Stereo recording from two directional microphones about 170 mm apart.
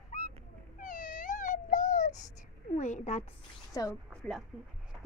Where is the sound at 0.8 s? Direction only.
50° left (ahead or behind).